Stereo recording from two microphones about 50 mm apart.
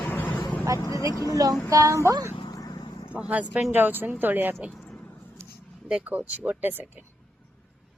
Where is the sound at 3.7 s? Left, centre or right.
Right.